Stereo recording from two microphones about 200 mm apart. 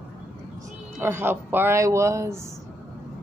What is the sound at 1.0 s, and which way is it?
A man's voice, 10° right (ahead or behind).